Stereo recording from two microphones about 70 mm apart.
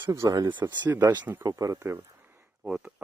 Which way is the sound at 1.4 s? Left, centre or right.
Right.